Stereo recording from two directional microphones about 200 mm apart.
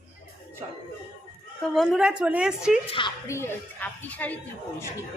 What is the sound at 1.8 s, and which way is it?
A woman's voice, centre (ahead or behind).